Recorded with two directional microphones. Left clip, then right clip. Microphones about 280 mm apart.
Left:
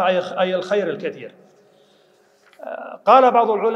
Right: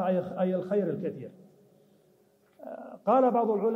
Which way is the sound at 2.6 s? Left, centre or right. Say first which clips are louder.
Left 11 dB; centre.